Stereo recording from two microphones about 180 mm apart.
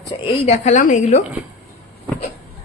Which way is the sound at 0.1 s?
25° left (ahead or behind).